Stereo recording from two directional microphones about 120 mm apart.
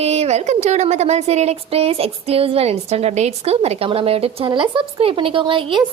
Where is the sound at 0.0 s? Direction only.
60° right (ahead or behind).